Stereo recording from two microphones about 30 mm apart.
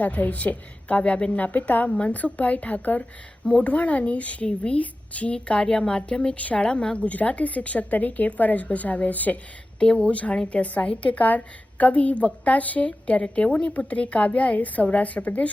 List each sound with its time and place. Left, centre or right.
0.0 s a woman's voice: left
1.4 s a woman's voice: left
1.9 s speech: left
2.1 s a woman's voice: left
3.0 s speech: left
3.7 s a woman's voice: left
4.4 s speech: left
4.8 s a woman's voice: left
5.3 s speech: left
5.6 s a woman's voice: left
6.3 s a woman's voice: left
9.8 s a woman's voice: left
10.1 s a woman's voice: left
11.2 s a woman's voice: left